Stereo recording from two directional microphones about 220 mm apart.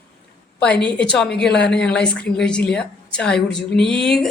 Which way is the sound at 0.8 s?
5° left (ahead or behind).